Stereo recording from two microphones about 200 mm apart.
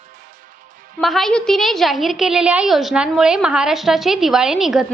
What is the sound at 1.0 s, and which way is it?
A woman's voice, centre (ahead or behind).